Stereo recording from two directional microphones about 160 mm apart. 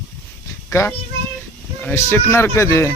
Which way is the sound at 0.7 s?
15° left (ahead or behind).